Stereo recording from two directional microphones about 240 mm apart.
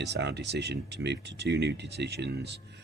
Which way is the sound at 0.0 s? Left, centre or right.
Right.